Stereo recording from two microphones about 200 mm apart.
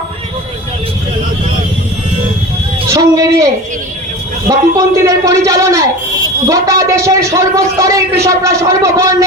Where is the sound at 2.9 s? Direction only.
15° right (ahead or behind).